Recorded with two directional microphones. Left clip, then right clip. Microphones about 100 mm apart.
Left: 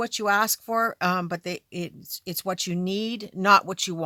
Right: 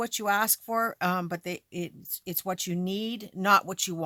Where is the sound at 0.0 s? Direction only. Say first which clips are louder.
Left 4 dB; 40° left (ahead or behind).